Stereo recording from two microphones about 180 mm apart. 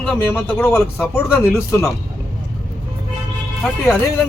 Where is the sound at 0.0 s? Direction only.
10° left (ahead or behind).